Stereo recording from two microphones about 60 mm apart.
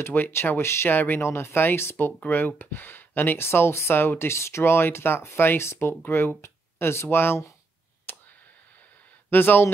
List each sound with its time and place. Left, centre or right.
0.0 s speech: left
0.9 s speech: left
8.1 s a sound: left
9.3 s speech: left